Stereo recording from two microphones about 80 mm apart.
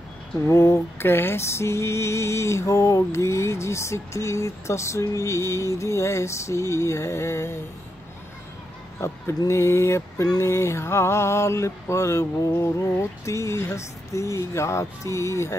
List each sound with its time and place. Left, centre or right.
0.5 s mantra: left
9.0 s mantra: left